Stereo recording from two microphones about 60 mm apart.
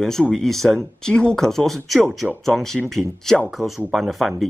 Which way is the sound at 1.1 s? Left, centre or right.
Centre.